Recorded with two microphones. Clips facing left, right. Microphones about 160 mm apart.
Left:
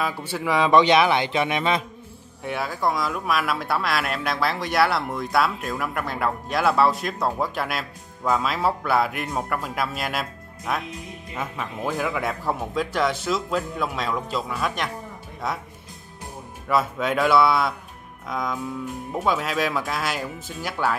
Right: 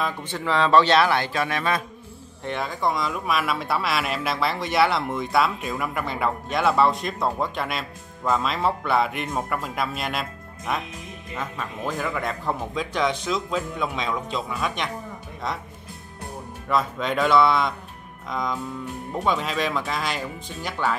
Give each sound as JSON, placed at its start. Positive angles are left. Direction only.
{"t": 0.0, "sound": "speech", "side_deg": 10}
{"t": 2.4, "sound": "speech", "side_deg": 5}
{"t": 11.3, "sound": "speech", "side_deg": 10}
{"t": 16.6, "sound": "speech", "side_deg": 5}